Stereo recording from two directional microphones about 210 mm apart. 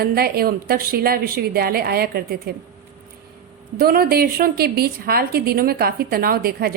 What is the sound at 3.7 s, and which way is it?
A woman's voice, 45° right (ahead or behind).